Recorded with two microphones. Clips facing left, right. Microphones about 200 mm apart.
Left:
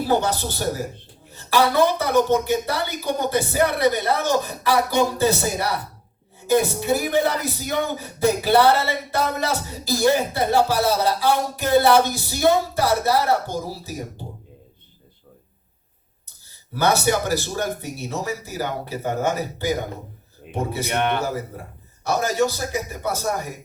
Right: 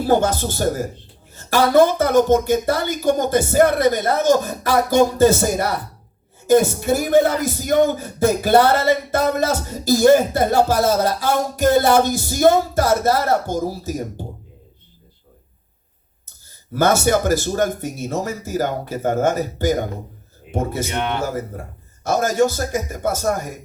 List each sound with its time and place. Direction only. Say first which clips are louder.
0.1 s speech: right 5 dB; 45° right (ahead or behind)
16.7 s speech: right 4 dB; 45° right (ahead or behind)
22.0 s speech: right 4 dB; 45° right (ahead or behind)